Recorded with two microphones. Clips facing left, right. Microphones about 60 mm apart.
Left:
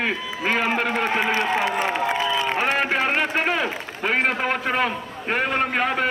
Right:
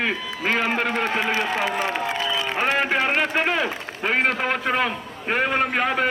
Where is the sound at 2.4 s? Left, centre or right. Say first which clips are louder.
Even; centre.